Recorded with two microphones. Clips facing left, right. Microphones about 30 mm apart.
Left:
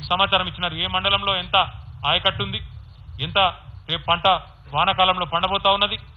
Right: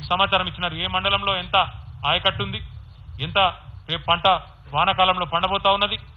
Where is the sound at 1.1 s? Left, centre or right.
Centre.